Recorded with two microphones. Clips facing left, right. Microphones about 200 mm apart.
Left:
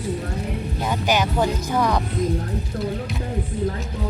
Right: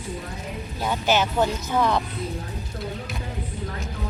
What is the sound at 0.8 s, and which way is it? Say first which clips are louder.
Speech: even; 10° left (ahead or behind).